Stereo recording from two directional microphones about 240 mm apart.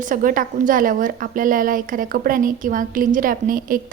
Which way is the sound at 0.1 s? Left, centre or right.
Right.